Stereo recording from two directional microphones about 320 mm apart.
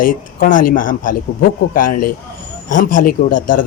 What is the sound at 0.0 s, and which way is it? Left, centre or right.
Speech, left.